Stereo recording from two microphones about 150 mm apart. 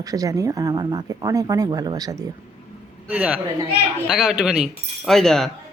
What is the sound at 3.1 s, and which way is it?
A man's voice, 5° right (ahead or behind).